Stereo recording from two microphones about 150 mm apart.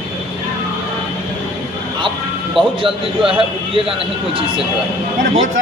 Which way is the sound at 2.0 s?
35° right (ahead or behind).